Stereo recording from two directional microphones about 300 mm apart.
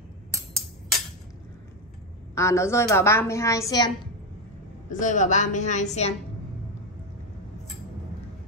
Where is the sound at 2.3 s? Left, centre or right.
Centre.